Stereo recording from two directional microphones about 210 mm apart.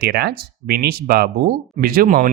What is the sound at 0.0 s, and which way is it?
Speech, 50° right (ahead or behind).